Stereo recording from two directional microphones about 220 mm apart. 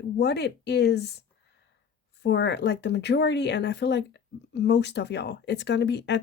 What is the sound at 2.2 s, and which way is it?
Speech, 50° left (ahead or behind).